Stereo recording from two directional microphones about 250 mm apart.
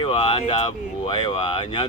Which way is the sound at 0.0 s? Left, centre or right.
Left.